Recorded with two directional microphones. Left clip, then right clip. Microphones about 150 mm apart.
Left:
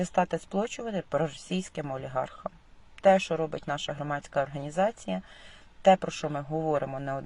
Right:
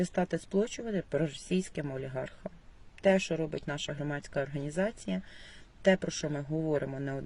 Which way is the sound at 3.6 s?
35° left (ahead or behind).